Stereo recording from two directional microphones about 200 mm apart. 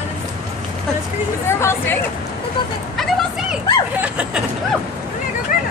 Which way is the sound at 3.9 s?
5° right (ahead or behind).